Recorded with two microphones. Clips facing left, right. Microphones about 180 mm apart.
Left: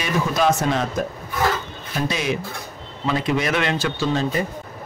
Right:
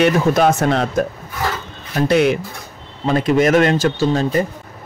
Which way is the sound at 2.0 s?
60° right (ahead or behind).